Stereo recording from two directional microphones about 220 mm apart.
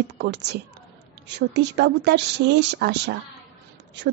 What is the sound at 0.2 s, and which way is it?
Speech, 50° right (ahead or behind).